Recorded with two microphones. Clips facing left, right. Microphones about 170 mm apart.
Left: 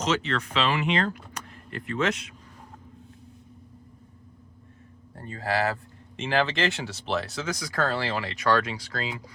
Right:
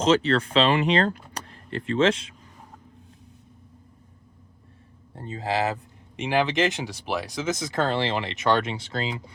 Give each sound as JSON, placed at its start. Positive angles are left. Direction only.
{"t": 0.0, "sound": "speech", "side_deg": -30}
{"t": 5.1, "sound": "speech", "side_deg": -20}